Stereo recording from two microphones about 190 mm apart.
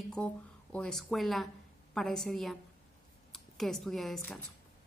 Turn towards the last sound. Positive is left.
turn(degrees=0)  # may be behind; listen again after turning